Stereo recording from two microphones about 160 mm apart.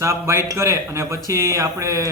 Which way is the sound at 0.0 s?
15° right (ahead or behind).